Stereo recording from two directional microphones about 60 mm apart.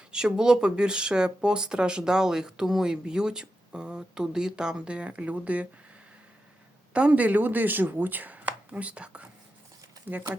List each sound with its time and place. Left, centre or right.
0.1 s speech: centre
6.9 s speech: right